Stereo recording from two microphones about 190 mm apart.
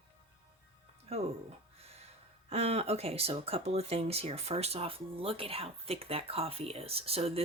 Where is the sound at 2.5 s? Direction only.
35° right (ahead or behind).